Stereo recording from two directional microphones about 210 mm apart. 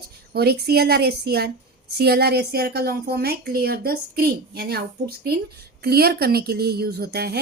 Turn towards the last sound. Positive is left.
turn(degrees=-50)  # may be behind; listen again after turning